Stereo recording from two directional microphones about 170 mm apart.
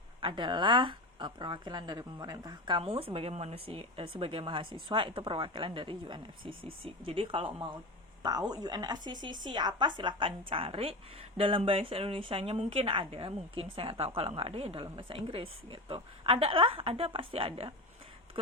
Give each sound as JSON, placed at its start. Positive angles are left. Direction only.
{"t": 0.2, "sound": "a woman's voice", "side_deg": -30}